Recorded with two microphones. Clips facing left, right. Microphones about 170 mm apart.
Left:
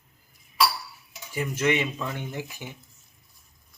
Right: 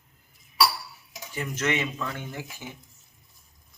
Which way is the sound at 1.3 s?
10° left (ahead or behind).